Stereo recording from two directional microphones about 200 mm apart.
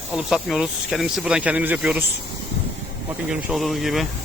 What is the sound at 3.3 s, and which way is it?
Speech, centre (ahead or behind).